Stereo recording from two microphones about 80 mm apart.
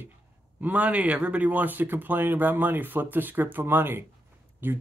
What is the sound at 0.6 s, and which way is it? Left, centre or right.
Speech, centre.